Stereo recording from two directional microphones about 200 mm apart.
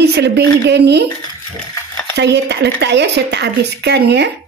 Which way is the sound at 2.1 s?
55° right (ahead or behind).